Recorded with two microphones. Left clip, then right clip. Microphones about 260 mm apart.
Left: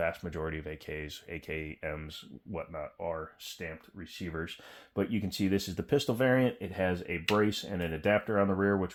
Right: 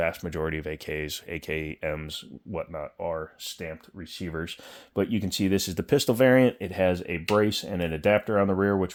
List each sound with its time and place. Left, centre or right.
0.0 s speech: right
4.3 s speech: right